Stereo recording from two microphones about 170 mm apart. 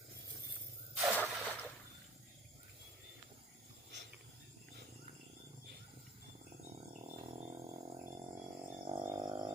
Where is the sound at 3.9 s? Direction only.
90° right.